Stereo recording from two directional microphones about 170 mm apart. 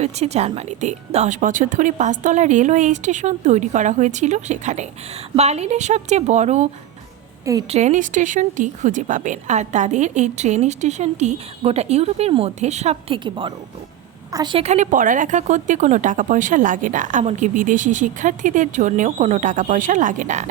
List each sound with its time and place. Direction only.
0.0 s a woman's voice: 40° right (ahead or behind)
7.7 s a woman's voice: 45° right (ahead or behind); by 14.6 s 25° right (ahead or behind)
14.6 s speech: 45° right (ahead or behind)